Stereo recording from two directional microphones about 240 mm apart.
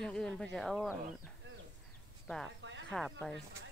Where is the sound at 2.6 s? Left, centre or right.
Right.